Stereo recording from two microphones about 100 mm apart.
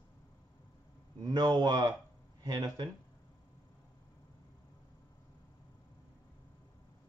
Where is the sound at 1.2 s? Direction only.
45° right (ahead or behind).